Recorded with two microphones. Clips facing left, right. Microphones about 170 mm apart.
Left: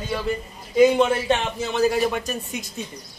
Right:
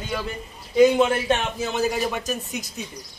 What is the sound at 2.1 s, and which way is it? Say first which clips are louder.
Speech: left 1 dB; 5° right (ahead or behind).